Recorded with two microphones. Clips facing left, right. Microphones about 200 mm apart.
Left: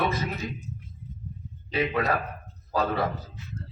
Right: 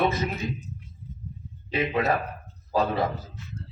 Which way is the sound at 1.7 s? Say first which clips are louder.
Right 1 dB; 25° right (ahead or behind).